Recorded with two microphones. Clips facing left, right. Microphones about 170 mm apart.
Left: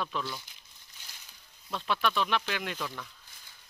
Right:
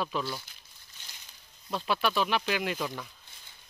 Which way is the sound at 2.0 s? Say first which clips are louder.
Right 1 dB; 5° right (ahead or behind).